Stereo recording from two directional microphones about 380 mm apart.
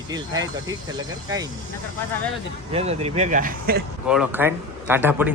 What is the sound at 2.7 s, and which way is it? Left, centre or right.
Speech, centre.